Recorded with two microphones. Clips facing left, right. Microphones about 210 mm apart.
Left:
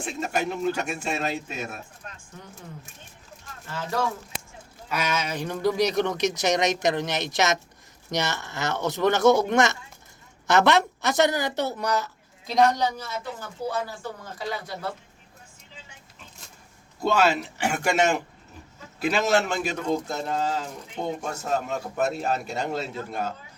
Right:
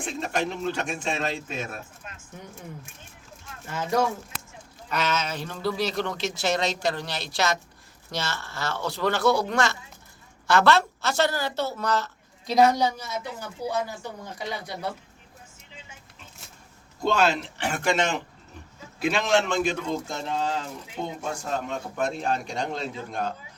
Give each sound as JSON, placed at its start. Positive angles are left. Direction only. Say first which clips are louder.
{"t": 0.0, "sound": "speech", "louder": "even", "side_deg": 5}
{"t": 3.7, "sound": "speech", "louder": "right 4 dB", "side_deg": -20}
{"t": 4.9, "sound": "speech", "louder": "even", "side_deg": 10}
{"t": 12.5, "sound": "speech", "louder": "right 1 dB", "side_deg": -5}
{"t": 17.0, "sound": "a man's voice", "louder": "left 1 dB", "side_deg": 5}